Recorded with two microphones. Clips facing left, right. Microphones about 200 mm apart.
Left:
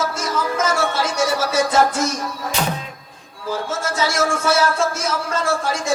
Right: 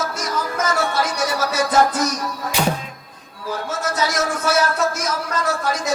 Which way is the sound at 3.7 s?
25° left (ahead or behind).